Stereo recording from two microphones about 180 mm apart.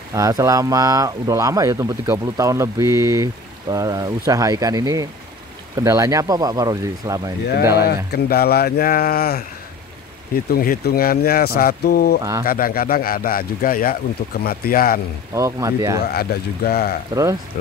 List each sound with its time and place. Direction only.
0.1 s speech: 20° right (ahead or behind)
7.8 s speech: 60° left (ahead or behind)
15.3 s speech: 15° right (ahead or behind)
16.1 s speech: 60° left (ahead or behind)
17.1 s speech: 20° right (ahead or behind)